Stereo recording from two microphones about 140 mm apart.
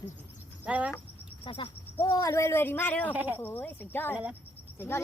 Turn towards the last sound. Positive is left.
turn(degrees=15)  # may be behind; listen again after turning